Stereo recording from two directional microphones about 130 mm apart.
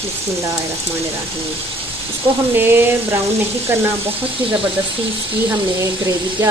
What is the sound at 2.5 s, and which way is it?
Sizzle, 15° right (ahead or behind).